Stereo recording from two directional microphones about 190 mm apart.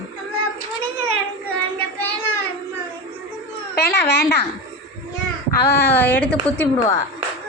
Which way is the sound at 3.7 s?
60° left (ahead or behind).